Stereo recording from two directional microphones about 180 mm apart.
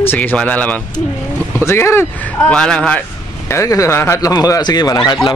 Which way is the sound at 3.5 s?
15° left (ahead or behind).